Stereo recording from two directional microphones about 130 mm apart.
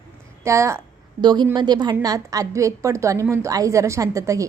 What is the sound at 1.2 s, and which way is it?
A woman's voice, 35° right (ahead or behind).